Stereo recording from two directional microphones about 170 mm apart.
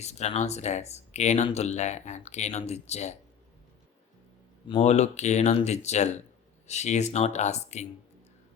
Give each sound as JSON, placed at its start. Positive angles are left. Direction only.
{"t": 0.0, "sound": "speech", "side_deg": 40}
{"t": 4.8, "sound": "speech", "side_deg": 40}